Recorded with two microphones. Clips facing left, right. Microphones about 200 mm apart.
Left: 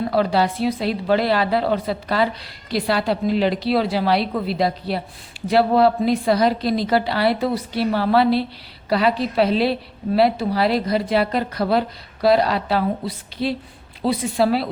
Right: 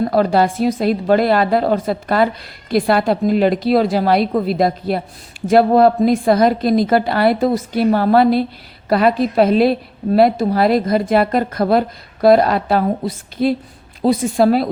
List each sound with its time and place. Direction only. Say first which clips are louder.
0.0 s a woman's voice: right 4 dB; 45° right (ahead or behind)